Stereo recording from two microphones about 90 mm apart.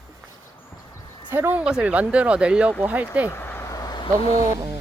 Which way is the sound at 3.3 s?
25° left (ahead or behind).